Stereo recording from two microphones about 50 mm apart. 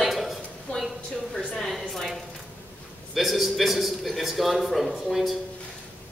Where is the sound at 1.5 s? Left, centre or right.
Centre.